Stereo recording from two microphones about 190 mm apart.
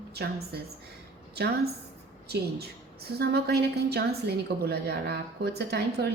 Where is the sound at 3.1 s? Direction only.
55° right (ahead or behind).